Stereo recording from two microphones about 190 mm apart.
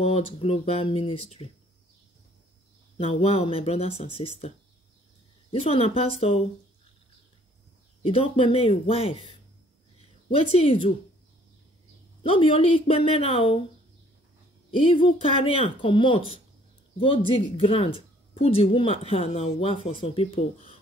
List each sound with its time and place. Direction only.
0.0 s speech: 30° left (ahead or behind)
3.0 s speech: 30° left (ahead or behind)
5.5 s speech: 30° left (ahead or behind)
8.0 s speech: 30° left (ahead or behind)
10.3 s speech: 30° left (ahead or behind)
12.2 s speech: 25° left (ahead or behind)
14.7 s speech: 25° left (ahead or behind)